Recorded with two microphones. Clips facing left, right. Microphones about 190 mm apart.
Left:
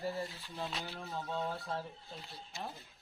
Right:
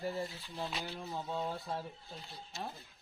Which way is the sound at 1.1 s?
15° right (ahead or behind).